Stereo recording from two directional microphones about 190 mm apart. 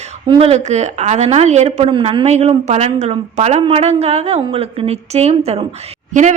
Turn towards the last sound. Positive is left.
turn(degrees=-40)  # may be behind; listen again after turning